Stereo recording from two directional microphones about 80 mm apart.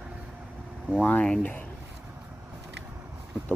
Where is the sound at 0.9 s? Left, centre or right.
Centre.